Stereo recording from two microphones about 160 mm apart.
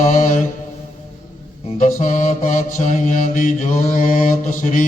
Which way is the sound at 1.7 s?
55° left (ahead or behind).